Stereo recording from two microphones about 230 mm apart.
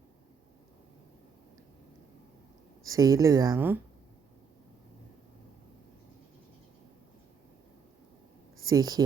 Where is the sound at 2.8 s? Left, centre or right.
Centre.